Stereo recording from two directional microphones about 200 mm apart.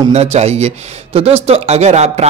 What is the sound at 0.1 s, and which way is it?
Speech, 30° right (ahead or behind).